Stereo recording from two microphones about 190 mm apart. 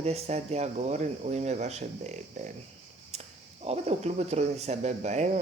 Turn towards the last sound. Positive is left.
turn(degrees=-35)  # may be behind; listen again after turning